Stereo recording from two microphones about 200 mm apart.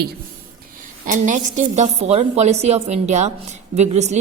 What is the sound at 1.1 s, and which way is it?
A woman's voice, 40° right (ahead or behind).